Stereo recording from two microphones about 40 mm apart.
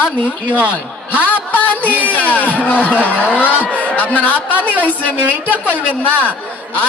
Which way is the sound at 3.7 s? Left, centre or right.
Left.